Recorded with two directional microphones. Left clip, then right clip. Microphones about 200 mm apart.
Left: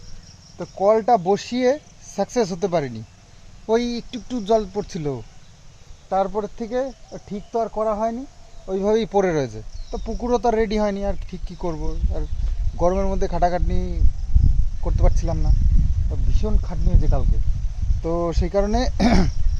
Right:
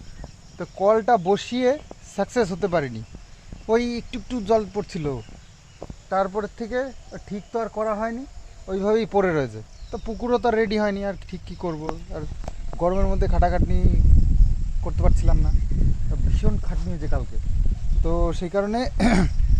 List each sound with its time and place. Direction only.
0.8 s speech: 5° left (ahead or behind)
14.8 s speech: 5° left (ahead or behind)
16.4 s speech: 10° left (ahead or behind)